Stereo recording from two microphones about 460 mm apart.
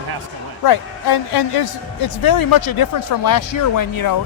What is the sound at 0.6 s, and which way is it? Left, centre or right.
A woman's voice, left.